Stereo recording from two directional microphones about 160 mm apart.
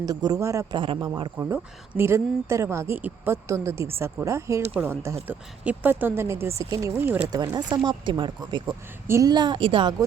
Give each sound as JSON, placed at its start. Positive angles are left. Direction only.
{"t": 0.0, "sound": "speech", "side_deg": -25}
{"t": 0.8, "sound": "speech", "side_deg": -30}
{"t": 1.4, "sound": "speech", "side_deg": -15}
{"t": 7.3, "sound": "speech", "side_deg": -25}
{"t": 8.6, "sound": "speech", "side_deg": -15}